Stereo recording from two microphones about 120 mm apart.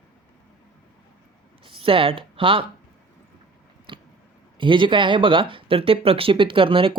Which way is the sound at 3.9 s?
45° right (ahead or behind).